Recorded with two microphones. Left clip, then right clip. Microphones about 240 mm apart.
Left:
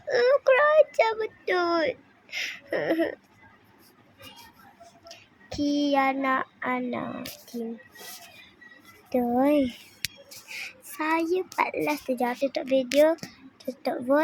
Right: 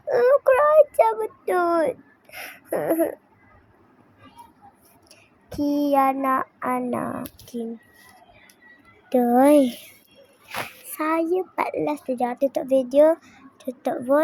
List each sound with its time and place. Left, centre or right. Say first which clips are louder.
0.1 s child singing: right 3 dB; centre
2.6 s speech: right 5 dB; centre
5.5 s speech: right 3 dB; centre
9.0 s speech: right 7 dB; centre
10.9 s speech: right 3 dB; centre
11.9 s speech: right 2 dB; centre
12.4 s speech: right 4 dB; centre
13.7 s speech: right 3 dB; centre